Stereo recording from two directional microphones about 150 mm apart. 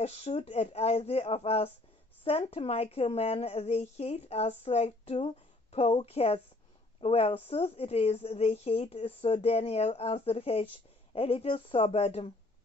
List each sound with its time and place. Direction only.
0.0 s speech: 45° left (ahead or behind)